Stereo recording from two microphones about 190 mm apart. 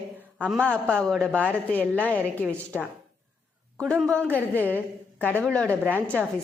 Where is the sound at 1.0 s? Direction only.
5° left (ahead or behind).